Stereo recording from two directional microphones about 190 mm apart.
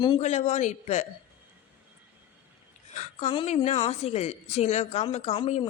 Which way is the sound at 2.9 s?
35° left (ahead or behind).